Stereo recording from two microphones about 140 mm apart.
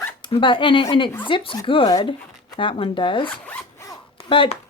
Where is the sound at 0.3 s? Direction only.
40° left (ahead or behind).